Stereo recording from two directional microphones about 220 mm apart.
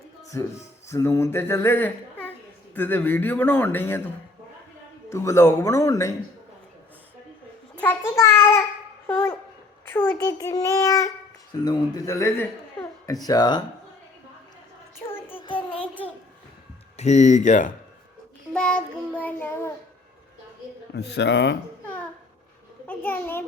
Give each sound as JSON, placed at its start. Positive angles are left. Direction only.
{"t": 0.3, "sound": "a man's voice", "side_deg": 15}
{"t": 5.0, "sound": "a man's voice", "side_deg": 15}
{"t": 7.8, "sound": "child singing", "side_deg": 10}
{"t": 9.0, "sound": "a sound", "side_deg": 10}
{"t": 10.1, "sound": "a man's voice", "side_deg": 10}
{"t": 15.0, "sound": "child singing", "side_deg": 10}
{"t": 15.4, "sound": "child singing", "side_deg": 25}
{"t": 17.0, "sound": "speech", "side_deg": 30}
{"t": 18.5, "sound": "child singing", "side_deg": 5}
{"t": 20.9, "sound": "a man's voice", "side_deg": 50}
{"t": 22.9, "sound": "a child's voice", "side_deg": 10}